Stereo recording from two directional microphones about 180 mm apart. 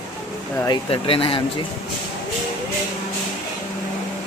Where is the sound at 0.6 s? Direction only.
30° left (ahead or behind).